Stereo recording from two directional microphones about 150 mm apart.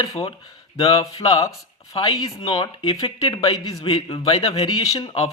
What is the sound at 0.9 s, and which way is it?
Speech, 20° left (ahead or behind).